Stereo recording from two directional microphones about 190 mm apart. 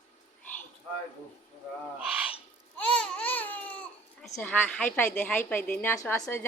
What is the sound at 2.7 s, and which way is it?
Baby cry, 5° left (ahead or behind).